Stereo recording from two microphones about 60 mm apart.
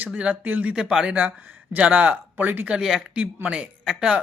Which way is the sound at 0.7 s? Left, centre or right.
Centre.